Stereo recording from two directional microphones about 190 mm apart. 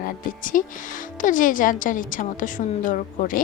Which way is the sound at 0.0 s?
45° left (ahead or behind).